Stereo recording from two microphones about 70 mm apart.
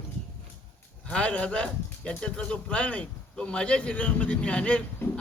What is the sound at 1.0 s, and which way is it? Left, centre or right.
Speech, centre.